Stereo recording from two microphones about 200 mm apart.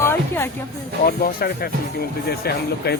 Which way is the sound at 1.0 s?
50° left (ahead or behind).